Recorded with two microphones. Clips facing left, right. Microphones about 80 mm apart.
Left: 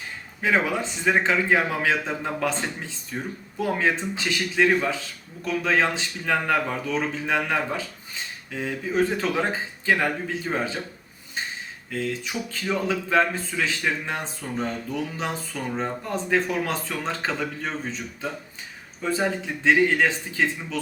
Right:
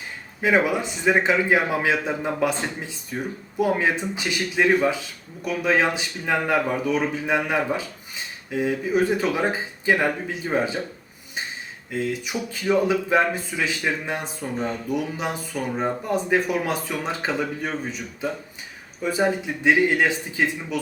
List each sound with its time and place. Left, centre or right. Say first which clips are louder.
0.4 s speech: right 3 dB; centre
11.9 s speech: right 2 dB; centre